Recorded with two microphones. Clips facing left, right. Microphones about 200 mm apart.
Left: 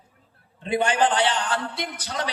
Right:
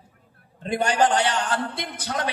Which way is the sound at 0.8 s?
40° right (ahead or behind).